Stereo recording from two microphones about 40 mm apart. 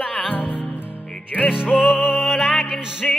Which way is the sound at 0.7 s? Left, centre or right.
Left.